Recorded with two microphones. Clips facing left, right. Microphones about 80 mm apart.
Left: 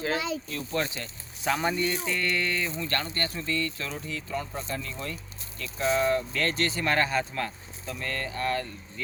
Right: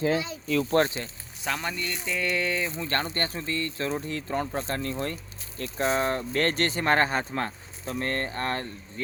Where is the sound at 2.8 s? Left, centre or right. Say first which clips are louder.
Right 2 dB; right.